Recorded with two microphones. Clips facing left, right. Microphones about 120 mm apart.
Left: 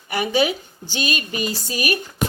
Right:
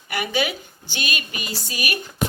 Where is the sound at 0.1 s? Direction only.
30° left (ahead or behind).